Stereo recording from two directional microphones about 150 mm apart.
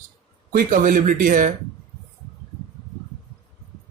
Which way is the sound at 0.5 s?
65° right (ahead or behind).